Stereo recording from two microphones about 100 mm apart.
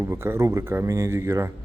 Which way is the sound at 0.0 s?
25° right (ahead or behind).